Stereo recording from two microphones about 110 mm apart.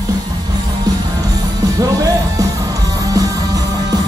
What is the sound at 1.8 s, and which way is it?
Speech, 35° right (ahead or behind).